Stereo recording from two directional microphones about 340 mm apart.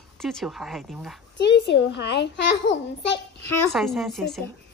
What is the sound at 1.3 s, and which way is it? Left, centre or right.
A child's voice, left.